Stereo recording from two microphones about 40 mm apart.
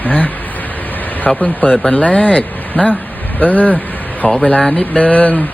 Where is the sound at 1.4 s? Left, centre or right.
Left.